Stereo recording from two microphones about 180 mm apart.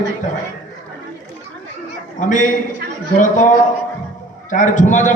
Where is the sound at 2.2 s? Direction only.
45° left (ahead or behind).